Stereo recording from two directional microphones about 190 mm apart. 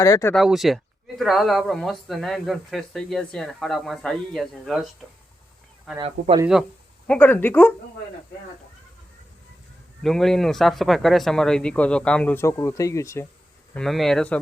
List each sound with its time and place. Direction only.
0.0 s speech: 15° left (ahead or behind)
0.3 s speech: centre (ahead or behind)
6.0 s speech: 30° right (ahead or behind)
7.1 s speech: 10° left (ahead or behind)
10.0 s speech: centre (ahead or behind)
13.7 s speech: centre (ahead or behind)